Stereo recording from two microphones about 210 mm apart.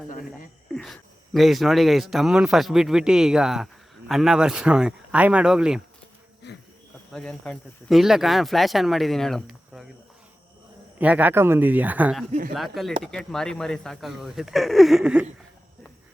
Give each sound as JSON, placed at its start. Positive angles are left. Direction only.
{"t": 0.7, "sound": "speech", "side_deg": 5}
{"t": 6.4, "sound": "a sound", "side_deg": 55}
{"t": 7.1, "sound": "speech", "side_deg": 5}
{"t": 10.9, "sound": "speech", "side_deg": -5}